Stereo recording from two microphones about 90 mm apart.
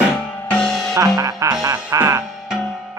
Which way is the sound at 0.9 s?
40° right (ahead or behind).